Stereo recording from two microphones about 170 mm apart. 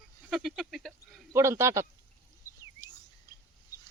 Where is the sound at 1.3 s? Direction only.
15° right (ahead or behind).